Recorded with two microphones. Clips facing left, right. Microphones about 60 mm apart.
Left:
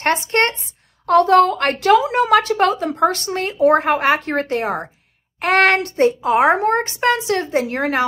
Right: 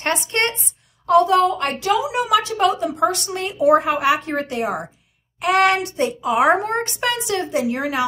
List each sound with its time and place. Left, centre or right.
0.0 s a child's voice: left
1.0 s a woman's voice: left